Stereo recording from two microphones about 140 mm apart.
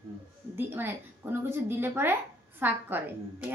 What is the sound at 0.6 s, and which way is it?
A woman's voice, 15° right (ahead or behind).